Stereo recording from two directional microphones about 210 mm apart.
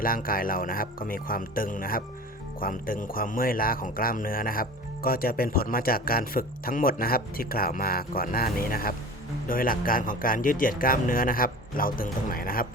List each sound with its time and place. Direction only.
0.0 s speech: 40° left (ahead or behind)